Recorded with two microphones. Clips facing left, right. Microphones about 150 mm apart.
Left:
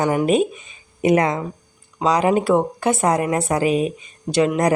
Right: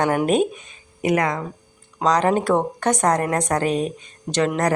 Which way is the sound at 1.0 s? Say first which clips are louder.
Left 4 dB; 20° left (ahead or behind).